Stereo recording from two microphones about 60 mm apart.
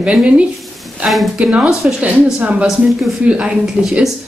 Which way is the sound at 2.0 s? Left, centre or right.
Right.